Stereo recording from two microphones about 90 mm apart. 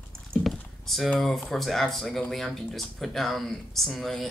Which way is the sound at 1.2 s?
5° left (ahead or behind).